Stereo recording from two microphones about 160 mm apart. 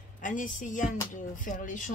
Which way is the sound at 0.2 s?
55° left (ahead or behind).